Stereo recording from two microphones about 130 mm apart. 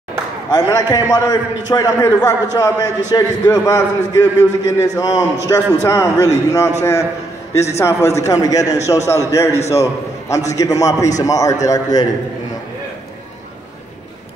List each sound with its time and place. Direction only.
0.5 s a man's voice: 25° left (ahead or behind)